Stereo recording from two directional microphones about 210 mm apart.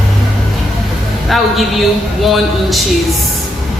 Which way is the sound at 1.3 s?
Centre (ahead or behind).